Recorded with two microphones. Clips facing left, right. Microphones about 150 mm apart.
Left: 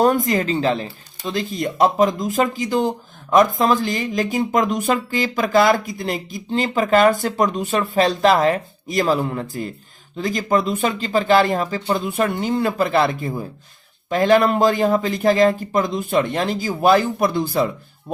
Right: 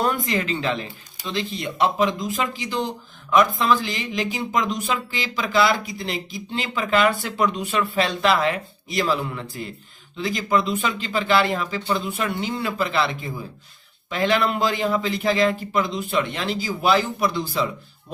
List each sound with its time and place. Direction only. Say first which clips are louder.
0.0 s speech: left 6 dB; 45° left (ahead or behind)